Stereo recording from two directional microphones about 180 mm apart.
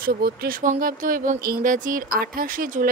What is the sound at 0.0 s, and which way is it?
Speech, 55° right (ahead or behind).